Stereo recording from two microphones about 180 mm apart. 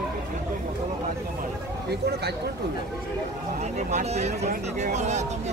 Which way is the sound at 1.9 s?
65° right (ahead or behind).